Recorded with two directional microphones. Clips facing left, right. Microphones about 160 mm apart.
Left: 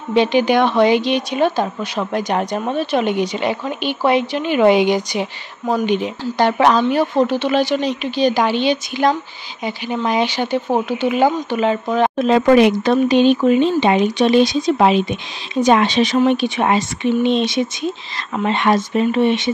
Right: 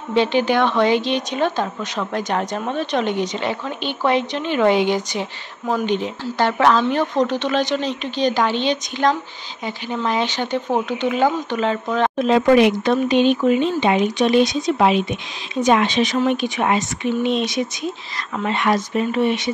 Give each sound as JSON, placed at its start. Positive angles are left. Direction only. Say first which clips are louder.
{"t": 0.1, "sound": "a woman's voice", "louder": "left 3 dB", "side_deg": 15}
{"t": 12.2, "sound": "speech", "louder": "left 2 dB", "side_deg": 45}